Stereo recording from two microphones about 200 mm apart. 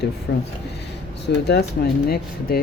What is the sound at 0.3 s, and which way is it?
Speech, 55° left (ahead or behind).